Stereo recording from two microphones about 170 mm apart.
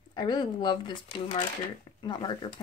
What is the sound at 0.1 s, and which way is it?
Speech, 25° left (ahead or behind).